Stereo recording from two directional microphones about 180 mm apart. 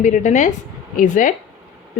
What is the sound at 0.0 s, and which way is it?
A woman's voice, 45° left (ahead or behind).